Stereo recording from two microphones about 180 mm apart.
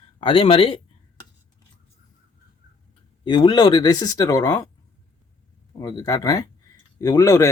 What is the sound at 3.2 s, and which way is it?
Speech, 25° left (ahead or behind).